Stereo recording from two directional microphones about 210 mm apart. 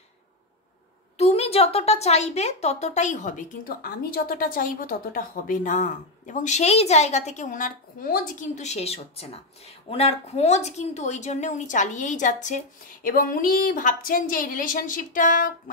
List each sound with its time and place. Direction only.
1.1 s a woman's voice: 30° left (ahead or behind)